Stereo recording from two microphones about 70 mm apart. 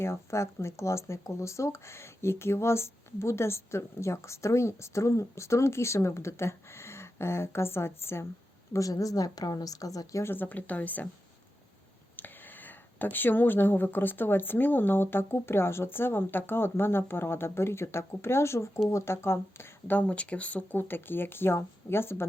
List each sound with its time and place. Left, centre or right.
0.0 s speech: left
8.7 s speech: left
10.2 s a woman's voice: left
12.1 s speech: left